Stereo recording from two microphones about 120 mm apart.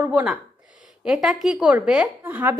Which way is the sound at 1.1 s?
5° right (ahead or behind).